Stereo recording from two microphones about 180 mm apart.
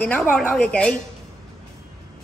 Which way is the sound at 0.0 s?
5° left (ahead or behind).